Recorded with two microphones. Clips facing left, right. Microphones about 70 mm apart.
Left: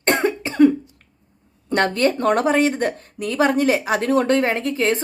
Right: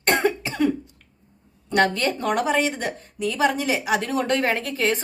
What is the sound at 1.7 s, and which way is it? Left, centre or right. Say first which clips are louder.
Speech: left 2 dB; left.